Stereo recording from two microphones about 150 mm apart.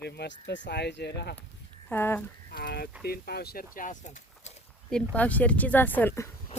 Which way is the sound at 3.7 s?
60° left (ahead or behind).